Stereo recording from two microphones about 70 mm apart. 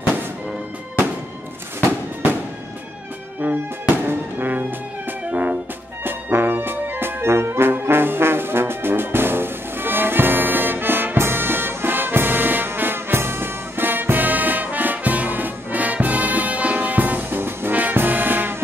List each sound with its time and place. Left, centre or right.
3.3 s music: right
6.0 s brass instrument: right